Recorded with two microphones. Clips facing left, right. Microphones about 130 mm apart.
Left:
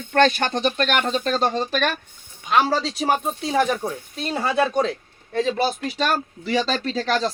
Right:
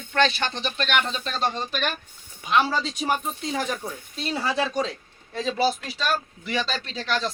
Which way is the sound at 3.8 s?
55° left (ahead or behind).